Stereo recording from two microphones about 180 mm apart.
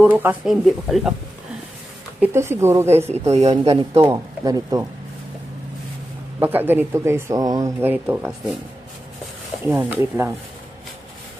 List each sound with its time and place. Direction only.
0.0 s speech: 10° right (ahead or behind)
2.2 s speech: 15° right (ahead or behind)
3.1 s speech: 35° right (ahead or behind)
4.1 s speech: 20° right (ahead or behind)
6.4 s speech: 10° right (ahead or behind)
9.6 s speech: 15° right (ahead or behind)